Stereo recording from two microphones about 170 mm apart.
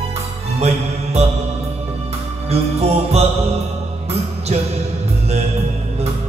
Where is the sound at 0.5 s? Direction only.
40° right (ahead or behind).